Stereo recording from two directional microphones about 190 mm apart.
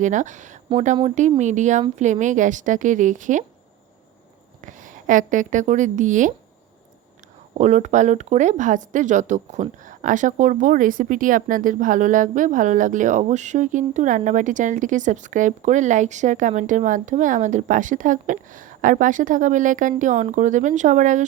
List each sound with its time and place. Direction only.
0.0 s speech: 40° right (ahead or behind)
4.6 s a woman's voice: 45° right (ahead or behind)
7.6 s speech: 40° right (ahead or behind)